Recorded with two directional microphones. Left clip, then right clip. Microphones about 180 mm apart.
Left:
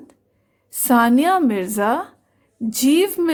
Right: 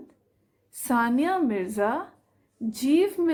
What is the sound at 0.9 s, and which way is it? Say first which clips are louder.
A woman's voice: left 9 dB; 40° left (ahead or behind).